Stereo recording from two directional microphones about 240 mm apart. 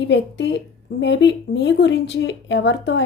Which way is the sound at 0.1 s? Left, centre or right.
Left.